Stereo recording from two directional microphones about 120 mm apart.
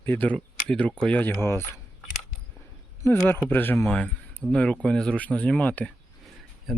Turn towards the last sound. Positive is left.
turn(degrees=0)  # may be behind; listen again after turning